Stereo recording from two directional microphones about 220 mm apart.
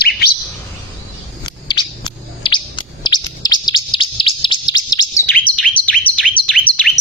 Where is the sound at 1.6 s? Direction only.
20° left (ahead or behind).